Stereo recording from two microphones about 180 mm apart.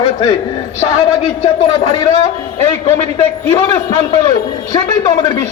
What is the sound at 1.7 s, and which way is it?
Speech, 25° left (ahead or behind).